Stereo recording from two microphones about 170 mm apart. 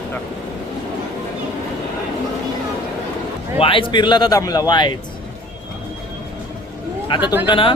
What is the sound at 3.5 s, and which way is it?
Speech, 30° left (ahead or behind).